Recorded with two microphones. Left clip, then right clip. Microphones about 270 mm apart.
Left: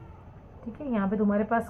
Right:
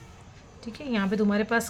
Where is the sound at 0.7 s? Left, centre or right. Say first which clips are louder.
Right 1 dB; right.